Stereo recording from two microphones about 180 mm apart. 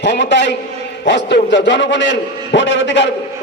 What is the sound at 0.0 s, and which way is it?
A man's voice, 75° left (ahead or behind).